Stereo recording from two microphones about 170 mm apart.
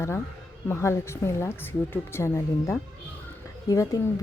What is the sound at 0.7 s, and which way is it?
A woman's voice, 15° left (ahead or behind).